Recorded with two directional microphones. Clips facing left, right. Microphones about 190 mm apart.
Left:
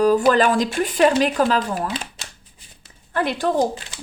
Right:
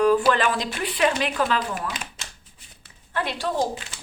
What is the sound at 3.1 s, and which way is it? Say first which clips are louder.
Speech: left 6 dB; 50° left (ahead or behind).